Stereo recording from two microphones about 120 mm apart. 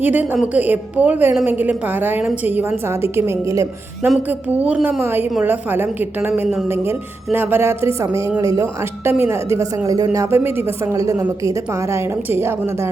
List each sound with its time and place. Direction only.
0.0 s a woman's voice: 15° right (ahead or behind)
4.3 s a woman's voice: 10° right (ahead or behind)